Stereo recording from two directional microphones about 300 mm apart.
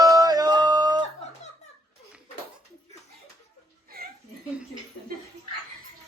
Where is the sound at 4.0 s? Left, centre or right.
Right.